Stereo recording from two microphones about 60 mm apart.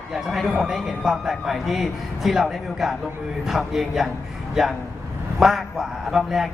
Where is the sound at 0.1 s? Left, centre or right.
Centre.